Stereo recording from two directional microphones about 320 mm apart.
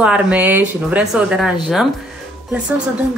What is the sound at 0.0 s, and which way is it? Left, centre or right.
Speech, centre.